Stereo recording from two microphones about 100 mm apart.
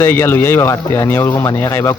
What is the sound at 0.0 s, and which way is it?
Speech, 20° left (ahead or behind).